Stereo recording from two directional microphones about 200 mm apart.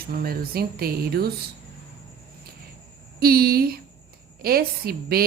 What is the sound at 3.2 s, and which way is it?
A woman's voice, 50° right (ahead or behind).